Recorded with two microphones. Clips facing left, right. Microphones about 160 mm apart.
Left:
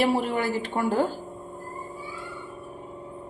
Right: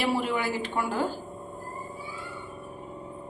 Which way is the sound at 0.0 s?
50° left (ahead or behind).